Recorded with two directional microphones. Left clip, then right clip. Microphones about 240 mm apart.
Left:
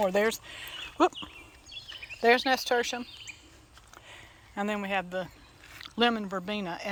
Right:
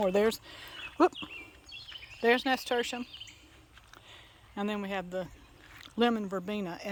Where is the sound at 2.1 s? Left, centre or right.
Centre.